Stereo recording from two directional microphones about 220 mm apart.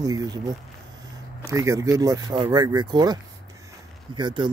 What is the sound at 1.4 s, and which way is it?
Speech, 15° right (ahead or behind).